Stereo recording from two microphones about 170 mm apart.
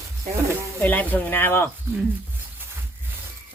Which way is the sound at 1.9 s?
15° right (ahead or behind).